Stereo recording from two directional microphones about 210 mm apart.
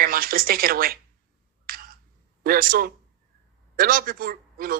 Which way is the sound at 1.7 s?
45° right (ahead or behind).